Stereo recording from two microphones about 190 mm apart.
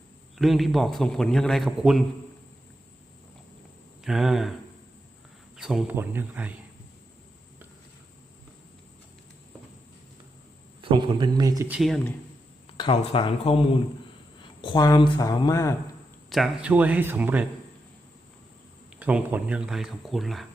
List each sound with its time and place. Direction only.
0.3 s a man's voice: centre (ahead or behind)
4.0 s a man's voice: centre (ahead or behind)
5.5 s speech: 5° right (ahead or behind)
10.8 s speech: 25° right (ahead or behind)
11.7 s a man's voice: centre (ahead or behind)
12.6 s speech: 30° left (ahead or behind)
16.3 s speech: 5° right (ahead or behind)
18.9 s a man's voice: 10° right (ahead or behind)